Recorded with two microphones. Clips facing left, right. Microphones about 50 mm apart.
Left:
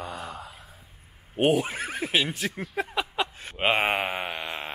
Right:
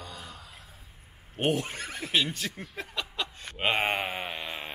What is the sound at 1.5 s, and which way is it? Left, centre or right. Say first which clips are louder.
Speech: left 6 dB; centre.